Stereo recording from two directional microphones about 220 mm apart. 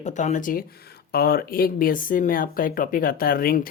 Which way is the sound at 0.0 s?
35° left (ahead or behind).